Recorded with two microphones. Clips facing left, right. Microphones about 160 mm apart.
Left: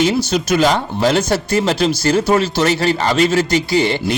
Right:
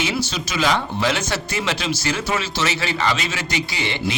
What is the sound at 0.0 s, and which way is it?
A man's voice, 45° left (ahead or behind).